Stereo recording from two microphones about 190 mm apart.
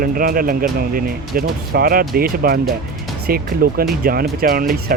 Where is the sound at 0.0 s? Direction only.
50° right (ahead or behind).